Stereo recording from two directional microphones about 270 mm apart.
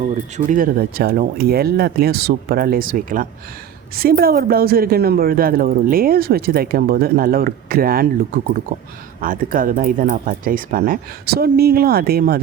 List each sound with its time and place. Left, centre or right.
0.3 s a woman's voice: right